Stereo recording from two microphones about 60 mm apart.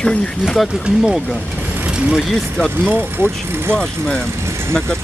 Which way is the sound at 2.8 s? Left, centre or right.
Right.